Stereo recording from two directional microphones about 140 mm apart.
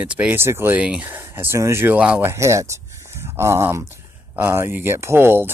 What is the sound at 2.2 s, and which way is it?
Speech, 20° right (ahead or behind).